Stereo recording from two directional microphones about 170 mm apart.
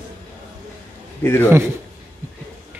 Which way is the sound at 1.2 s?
15° left (ahead or behind).